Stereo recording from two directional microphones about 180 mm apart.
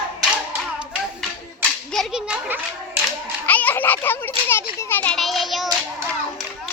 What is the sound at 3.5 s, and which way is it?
Children playing, 10° left (ahead or behind).